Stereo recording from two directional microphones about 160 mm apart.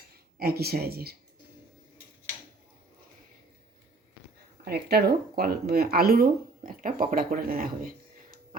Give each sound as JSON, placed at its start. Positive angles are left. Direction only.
{"t": 0.3, "sound": "speech", "side_deg": -75}
{"t": 4.6, "sound": "speech", "side_deg": -80}